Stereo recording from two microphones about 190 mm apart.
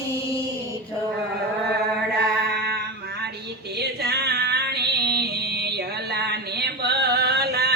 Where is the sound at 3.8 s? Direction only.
60° right (ahead or behind).